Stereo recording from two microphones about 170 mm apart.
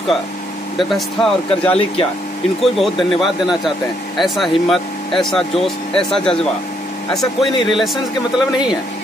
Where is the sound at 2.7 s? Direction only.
Centre (ahead or behind).